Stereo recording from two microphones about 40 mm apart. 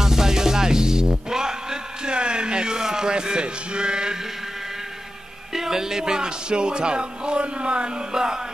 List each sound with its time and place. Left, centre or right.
0.0 s music: centre
5.5 s music: centre